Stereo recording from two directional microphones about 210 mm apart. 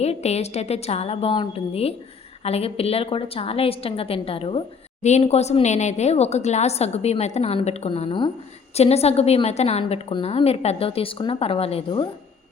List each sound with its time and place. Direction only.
0.0 s a woman's voice: 30° left (ahead or behind)